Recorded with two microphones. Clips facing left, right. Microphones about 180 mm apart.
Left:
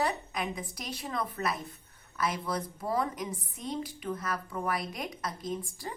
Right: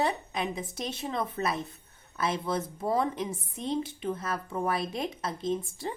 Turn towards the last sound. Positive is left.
turn(degrees=-25)  # may be behind; listen again after turning